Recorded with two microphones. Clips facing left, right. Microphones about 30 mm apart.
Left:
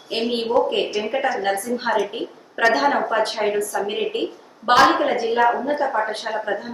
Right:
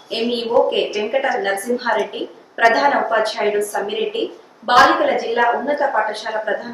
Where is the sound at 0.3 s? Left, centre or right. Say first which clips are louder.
Right 1 dB; centre.